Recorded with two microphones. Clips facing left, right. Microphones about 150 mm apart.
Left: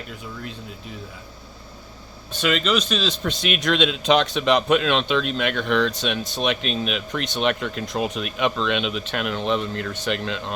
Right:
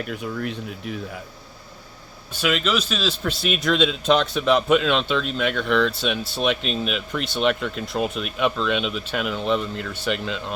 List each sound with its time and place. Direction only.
0.1 s speech: 65° right (ahead or behind)
2.3 s a man's voice: 5° right (ahead or behind)